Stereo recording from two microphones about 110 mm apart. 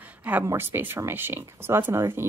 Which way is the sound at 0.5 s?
20° right (ahead or behind).